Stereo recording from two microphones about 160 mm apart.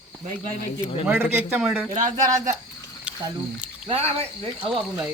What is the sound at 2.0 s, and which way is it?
Speech, 20° right (ahead or behind).